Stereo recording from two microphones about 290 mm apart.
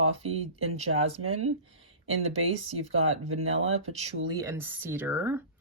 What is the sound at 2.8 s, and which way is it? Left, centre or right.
Speech, right.